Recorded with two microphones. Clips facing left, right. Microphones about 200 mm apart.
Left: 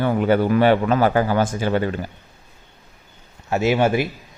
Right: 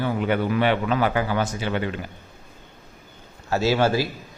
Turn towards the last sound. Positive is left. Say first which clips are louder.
# left 2 dB
turn(degrees=20)  # may be behind; listen again after turning